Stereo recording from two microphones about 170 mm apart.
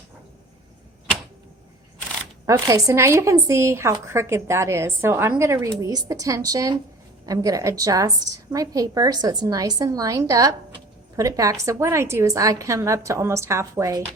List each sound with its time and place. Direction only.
2.5 s a woman's voice: 20° right (ahead or behind)